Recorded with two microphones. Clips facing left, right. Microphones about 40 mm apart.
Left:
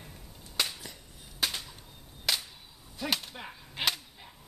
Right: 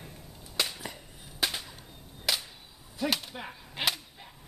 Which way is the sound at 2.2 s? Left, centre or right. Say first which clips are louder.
Even; centre.